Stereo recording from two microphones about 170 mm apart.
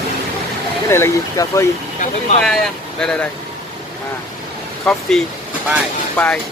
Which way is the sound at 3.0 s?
5° left (ahead or behind).